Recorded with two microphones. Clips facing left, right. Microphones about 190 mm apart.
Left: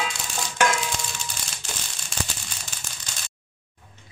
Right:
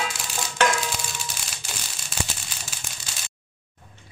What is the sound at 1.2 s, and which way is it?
Crushing, 5° right (ahead or behind).